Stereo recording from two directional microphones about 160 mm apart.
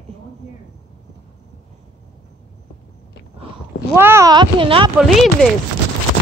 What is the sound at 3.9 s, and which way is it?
Speech, 15° right (ahead or behind).